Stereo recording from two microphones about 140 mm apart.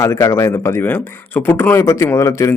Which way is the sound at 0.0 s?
20° left (ahead or behind).